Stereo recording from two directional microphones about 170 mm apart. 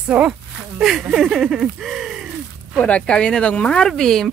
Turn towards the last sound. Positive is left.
turn(degrees=0)  # may be behind; listen again after turning